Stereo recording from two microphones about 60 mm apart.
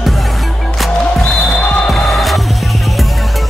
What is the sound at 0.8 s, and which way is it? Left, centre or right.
Music, centre.